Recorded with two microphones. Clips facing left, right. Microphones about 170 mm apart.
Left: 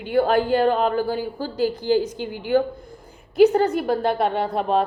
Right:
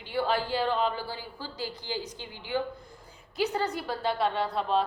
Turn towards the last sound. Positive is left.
turn(degrees=55)  # may be behind; listen again after turning